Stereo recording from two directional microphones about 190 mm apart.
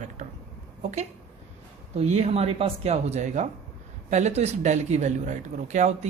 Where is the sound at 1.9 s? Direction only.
35° right (ahead or behind).